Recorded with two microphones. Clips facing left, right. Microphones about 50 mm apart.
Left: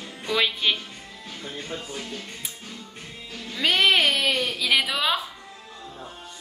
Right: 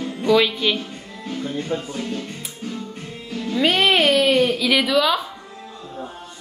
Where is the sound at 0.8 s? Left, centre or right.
Right.